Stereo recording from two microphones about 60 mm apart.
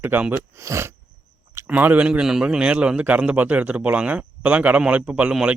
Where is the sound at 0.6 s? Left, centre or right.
Right.